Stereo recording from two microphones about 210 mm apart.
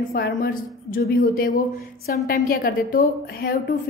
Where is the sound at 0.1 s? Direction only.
45° left (ahead or behind).